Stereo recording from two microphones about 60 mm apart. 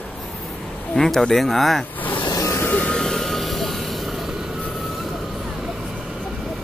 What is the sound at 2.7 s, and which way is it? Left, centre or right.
Vehicle, left.